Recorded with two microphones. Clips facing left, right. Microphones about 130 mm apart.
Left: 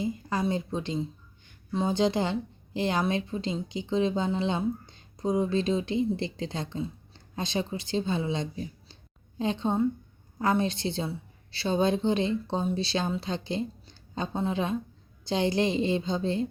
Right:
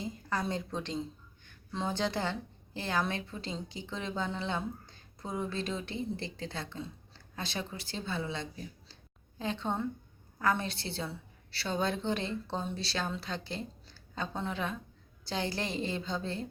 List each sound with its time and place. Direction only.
0.0 s a woman's voice: 10° left (ahead or behind)